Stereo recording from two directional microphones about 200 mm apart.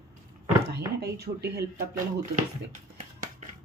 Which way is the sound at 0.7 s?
55° right (ahead or behind).